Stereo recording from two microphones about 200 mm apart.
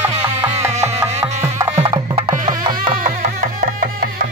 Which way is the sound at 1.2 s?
15° right (ahead or behind).